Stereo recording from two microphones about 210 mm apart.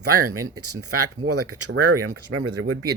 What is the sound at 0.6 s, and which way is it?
Speech, 90° right.